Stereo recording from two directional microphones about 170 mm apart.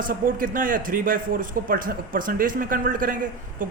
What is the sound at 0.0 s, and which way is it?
A man's voice, 55° right (ahead or behind).